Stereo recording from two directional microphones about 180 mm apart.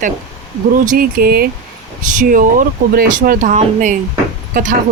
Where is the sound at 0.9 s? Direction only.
55° right (ahead or behind).